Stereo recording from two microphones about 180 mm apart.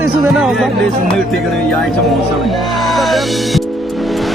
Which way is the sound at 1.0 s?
Centre (ahead or behind).